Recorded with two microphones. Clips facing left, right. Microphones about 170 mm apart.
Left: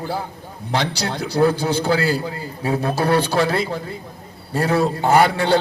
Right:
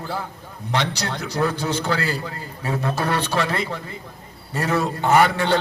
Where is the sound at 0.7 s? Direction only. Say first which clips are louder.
Left 2 dB; 35° left (ahead or behind).